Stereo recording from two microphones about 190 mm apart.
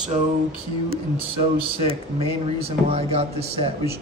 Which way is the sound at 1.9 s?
30° right (ahead or behind).